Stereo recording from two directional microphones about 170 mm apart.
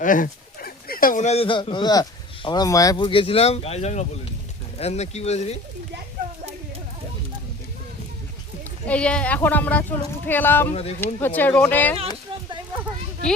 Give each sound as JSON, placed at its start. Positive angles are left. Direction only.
{"t": 0.0, "sound": "speech", "side_deg": 50}
{"t": 8.9, "sound": "speech", "side_deg": 5}
{"t": 10.7, "sound": "speech", "side_deg": 35}
{"t": 11.0, "sound": "speech", "side_deg": 10}